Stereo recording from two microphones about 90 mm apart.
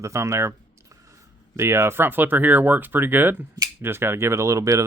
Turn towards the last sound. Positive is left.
turn(degrees=-35)  # may be behind; listen again after turning